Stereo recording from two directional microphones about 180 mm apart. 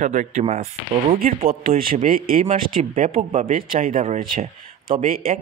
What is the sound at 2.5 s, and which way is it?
Speech, 40° right (ahead or behind).